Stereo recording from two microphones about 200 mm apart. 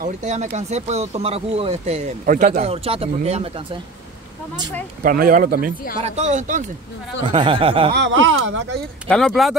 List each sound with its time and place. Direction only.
0.0 s speech: 35° right (ahead or behind)
2.6 s speech: 30° right (ahead or behind)
5.0 s speech: 45° right (ahead or behind)
6.0 s speech: 35° right (ahead or behind)
7.3 s speech: 25° right (ahead or behind)
7.9 s speech: 70° right (ahead or behind)
9.0 s speech: centre (ahead or behind)